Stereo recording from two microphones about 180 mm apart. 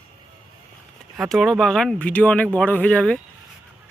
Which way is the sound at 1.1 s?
Centre (ahead or behind).